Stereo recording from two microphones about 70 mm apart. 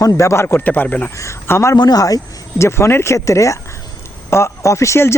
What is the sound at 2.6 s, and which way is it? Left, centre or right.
Speech, left.